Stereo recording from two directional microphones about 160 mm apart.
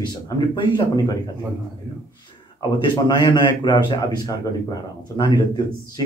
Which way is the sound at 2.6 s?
25° left (ahead or behind).